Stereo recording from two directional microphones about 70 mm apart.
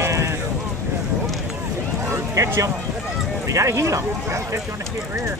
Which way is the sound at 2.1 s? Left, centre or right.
Right.